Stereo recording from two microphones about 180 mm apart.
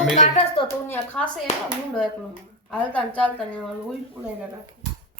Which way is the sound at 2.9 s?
5° left (ahead or behind).